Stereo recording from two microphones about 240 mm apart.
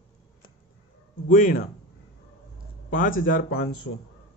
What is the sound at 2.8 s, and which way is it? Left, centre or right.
Speech, left.